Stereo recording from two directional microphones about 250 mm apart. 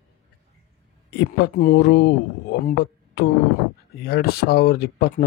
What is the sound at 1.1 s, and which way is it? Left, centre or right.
Speech, left.